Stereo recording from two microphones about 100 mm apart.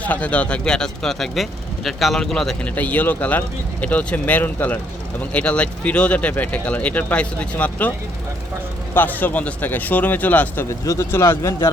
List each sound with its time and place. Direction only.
0.0 s speech: 15° left (ahead or behind)
2.6 s speech: 15° left (ahead or behind)
9.0 s speech: 15° left (ahead or behind)
10.7 s speech: 30° left (ahead or behind)